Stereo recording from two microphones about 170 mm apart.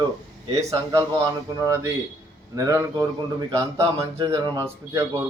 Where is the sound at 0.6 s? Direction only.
20° right (ahead or behind).